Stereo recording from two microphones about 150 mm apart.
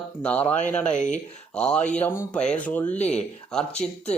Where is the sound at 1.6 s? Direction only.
5° left (ahead or behind).